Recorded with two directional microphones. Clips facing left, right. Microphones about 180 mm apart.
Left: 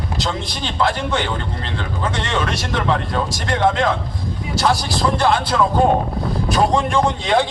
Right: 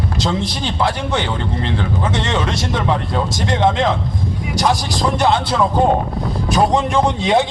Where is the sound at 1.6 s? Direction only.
20° right (ahead or behind).